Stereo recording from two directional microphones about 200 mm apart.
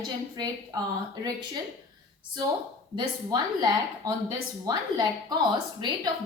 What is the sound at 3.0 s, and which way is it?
A woman's voice, 20° right (ahead or behind).